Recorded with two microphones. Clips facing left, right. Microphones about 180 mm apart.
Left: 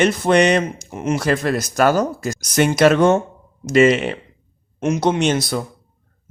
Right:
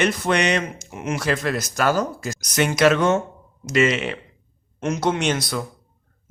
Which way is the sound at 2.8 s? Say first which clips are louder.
Left 4 dB; 50° left (ahead or behind).